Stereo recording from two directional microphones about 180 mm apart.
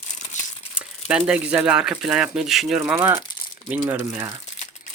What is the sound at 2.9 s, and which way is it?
Speech, 15° right (ahead or behind).